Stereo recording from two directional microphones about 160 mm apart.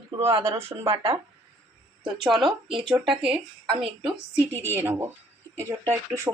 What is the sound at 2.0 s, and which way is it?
Speech, centre (ahead or behind).